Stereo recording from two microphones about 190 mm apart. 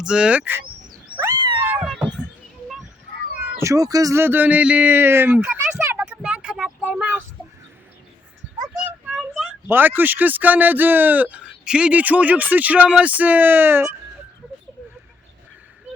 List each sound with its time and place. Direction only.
0.0 s speech: 5° right (ahead or behind)
1.1 s cat: 15° right (ahead or behind)
1.7 s cat: centre (ahead or behind)
3.5 s a sound: 15° right (ahead or behind)
9.0 s speech: centre (ahead or behind)